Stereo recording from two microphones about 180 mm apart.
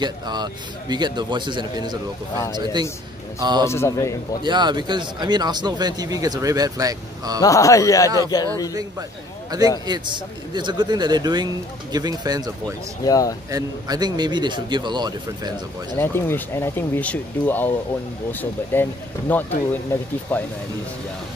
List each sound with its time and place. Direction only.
0.0 s speech: 25° right (ahead or behind)
3.6 s speech: 15° left (ahead or behind)
4.4 s speech: 25° right (ahead or behind)
7.4 s speech: 20° left (ahead or behind)
9.5 s speech: 20° right (ahead or behind)
13.0 s speech: 20° left (ahead or behind)
13.5 s speech: 20° right (ahead or behind)
16.0 s speech: 10° left (ahead or behind)